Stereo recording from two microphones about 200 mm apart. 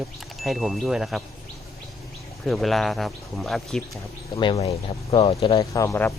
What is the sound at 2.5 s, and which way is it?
Speech, centre (ahead or behind).